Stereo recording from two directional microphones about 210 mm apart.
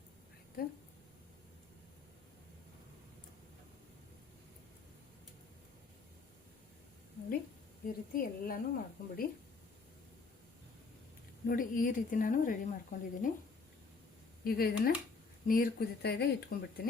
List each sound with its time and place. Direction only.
7.9 s a woman's voice: 40° left (ahead or behind)
11.4 s a woman's voice: 40° left (ahead or behind)
14.4 s speech: 45° left (ahead or behind)